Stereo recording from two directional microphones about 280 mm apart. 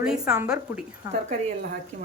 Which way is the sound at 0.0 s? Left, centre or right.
Centre.